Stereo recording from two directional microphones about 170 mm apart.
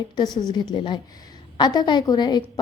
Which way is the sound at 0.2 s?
25° left (ahead or behind).